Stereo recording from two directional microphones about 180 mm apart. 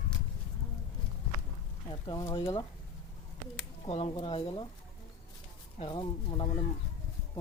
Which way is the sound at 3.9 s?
35° left (ahead or behind).